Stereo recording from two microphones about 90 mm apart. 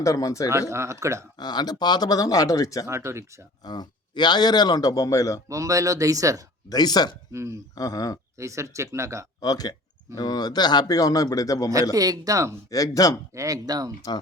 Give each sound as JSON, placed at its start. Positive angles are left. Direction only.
{"t": 0.0, "sound": "speech", "side_deg": 40}
{"t": 0.7, "sound": "speech", "side_deg": -30}
{"t": 1.4, "sound": "a man's voice", "side_deg": 50}
{"t": 2.8, "sound": "speech", "side_deg": -30}
{"t": 3.6, "sound": "a man's voice", "side_deg": 50}
{"t": 5.5, "sound": "speech", "side_deg": -35}
{"t": 6.7, "sound": "a man's voice", "side_deg": 50}
{"t": 7.3, "sound": "speech", "side_deg": -35}
{"t": 7.8, "sound": "a man's voice", "side_deg": 45}
{"t": 8.4, "sound": "speech", "side_deg": -35}
{"t": 9.4, "sound": "a man's voice", "side_deg": 45}
{"t": 11.9, "sound": "speech", "side_deg": -45}
{"t": 12.7, "sound": "speech", "side_deg": 40}
{"t": 13.3, "sound": "speech", "side_deg": -40}